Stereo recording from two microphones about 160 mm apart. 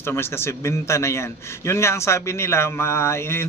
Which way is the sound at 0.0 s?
15° left (ahead or behind).